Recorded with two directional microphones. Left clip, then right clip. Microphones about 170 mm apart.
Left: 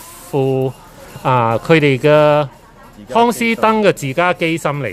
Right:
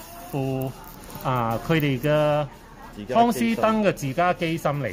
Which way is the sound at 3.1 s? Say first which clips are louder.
Left 7 dB; 25° left (ahead or behind).